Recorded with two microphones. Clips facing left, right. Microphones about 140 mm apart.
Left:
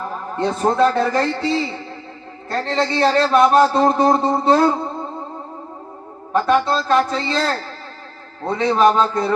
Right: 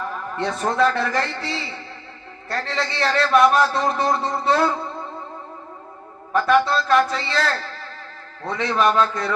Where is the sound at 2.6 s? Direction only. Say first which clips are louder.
Left 7 dB; 25° left (ahead or behind).